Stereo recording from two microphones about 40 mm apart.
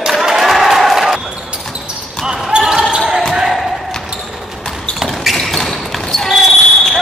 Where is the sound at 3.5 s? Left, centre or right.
Centre.